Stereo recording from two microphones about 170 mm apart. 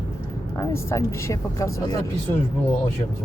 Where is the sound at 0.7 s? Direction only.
15° left (ahead or behind).